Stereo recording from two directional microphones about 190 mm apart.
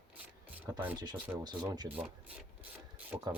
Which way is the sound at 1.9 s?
5° right (ahead or behind).